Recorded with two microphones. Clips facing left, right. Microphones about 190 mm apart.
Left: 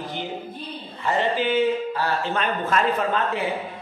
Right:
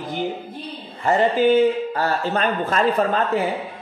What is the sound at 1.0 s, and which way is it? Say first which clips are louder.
Speech: right 6 dB; 45° right (ahead or behind).